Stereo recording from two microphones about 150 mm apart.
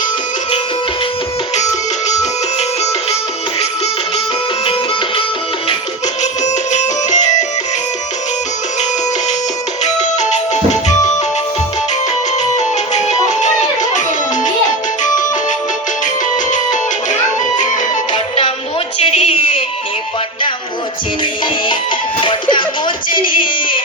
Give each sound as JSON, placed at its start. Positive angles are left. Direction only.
{"t": 2.6, "sound": "music", "side_deg": 45}
{"t": 6.4, "sound": "music", "side_deg": 50}
{"t": 9.8, "sound": "music", "side_deg": 50}
{"t": 12.4, "sound": "music", "side_deg": 50}
{"t": 16.5, "sound": "music", "side_deg": 55}
{"t": 18.9, "sound": "a sound", "side_deg": 40}
{"t": 22.2, "sound": "music", "side_deg": 35}
{"t": 23.4, "sound": "a sound", "side_deg": 35}